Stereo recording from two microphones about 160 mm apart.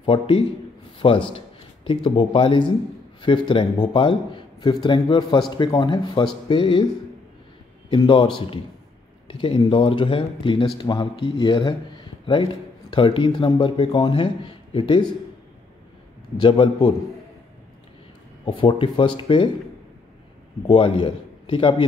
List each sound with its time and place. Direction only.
0.0 s a man's voice: 35° left (ahead or behind)
7.9 s a man's voice: 30° left (ahead or behind)
16.3 s a man's voice: 30° left (ahead or behind)
18.4 s a man's voice: 35° left (ahead or behind)
20.6 s a man's voice: 35° left (ahead or behind)